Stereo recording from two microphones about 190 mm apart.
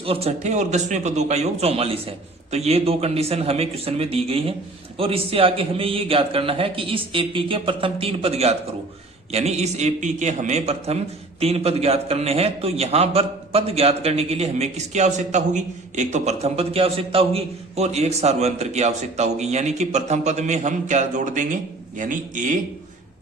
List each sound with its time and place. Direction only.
0.0 s a man's voice: 30° right (ahead or behind)